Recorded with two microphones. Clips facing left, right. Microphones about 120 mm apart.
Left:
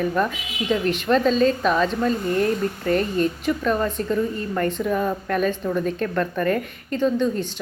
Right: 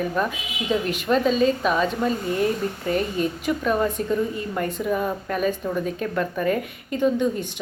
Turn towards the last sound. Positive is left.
turn(degrees=-15)  # may be behind; listen again after turning